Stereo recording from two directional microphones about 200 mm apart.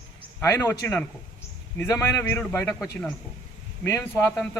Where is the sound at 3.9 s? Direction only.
10° left (ahead or behind).